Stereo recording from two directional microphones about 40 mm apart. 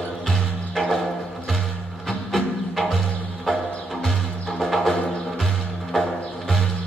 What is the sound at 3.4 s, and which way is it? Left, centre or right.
Music, centre.